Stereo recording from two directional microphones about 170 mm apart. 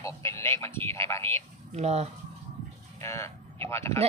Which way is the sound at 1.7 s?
40° right (ahead or behind).